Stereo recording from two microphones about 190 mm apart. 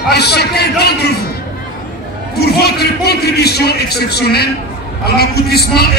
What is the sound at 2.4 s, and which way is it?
A man's voice, 55° left (ahead or behind).